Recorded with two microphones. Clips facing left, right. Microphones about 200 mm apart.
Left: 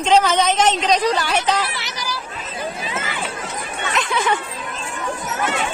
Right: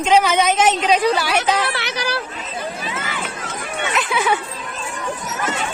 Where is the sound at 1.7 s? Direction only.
65° right (ahead or behind).